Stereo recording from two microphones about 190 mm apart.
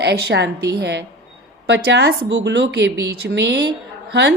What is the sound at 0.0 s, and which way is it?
A woman's voice, 60° right (ahead or behind).